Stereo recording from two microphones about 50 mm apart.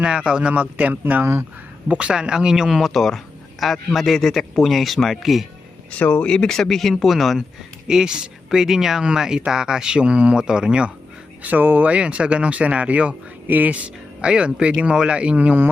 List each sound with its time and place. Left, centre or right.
0.0 s speech: centre
0.5 s a man's voice: right
1.2 s speech: right
1.9 s speech: right
2.9 s a man's voice: centre
5.9 s speech: left; by 7.3 s centre
7.9 s speech: centre
11.4 s a man's voice: right
11.9 s speech: right